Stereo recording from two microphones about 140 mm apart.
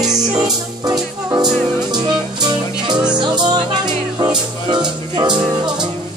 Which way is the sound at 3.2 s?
30° right (ahead or behind).